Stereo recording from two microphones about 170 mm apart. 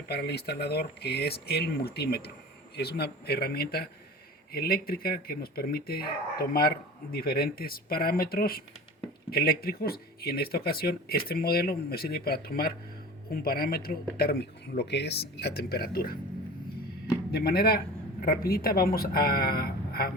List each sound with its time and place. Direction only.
0.1 s speech: 70° left (ahead or behind)
17.3 s speech: 65° left (ahead or behind)